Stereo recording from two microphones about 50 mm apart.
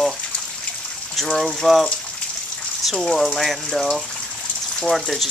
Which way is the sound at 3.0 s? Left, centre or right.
Centre.